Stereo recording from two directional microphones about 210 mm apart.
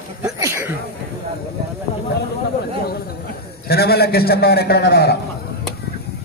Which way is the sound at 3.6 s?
50° left (ahead or behind).